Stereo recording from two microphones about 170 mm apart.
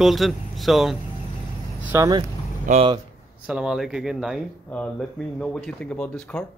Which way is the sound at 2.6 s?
40° right (ahead or behind).